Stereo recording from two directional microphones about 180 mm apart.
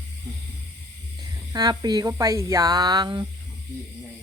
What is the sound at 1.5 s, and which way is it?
Speech, 20° right (ahead or behind).